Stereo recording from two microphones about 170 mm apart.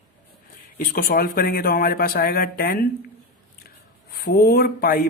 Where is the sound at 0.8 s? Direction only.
60° left (ahead or behind).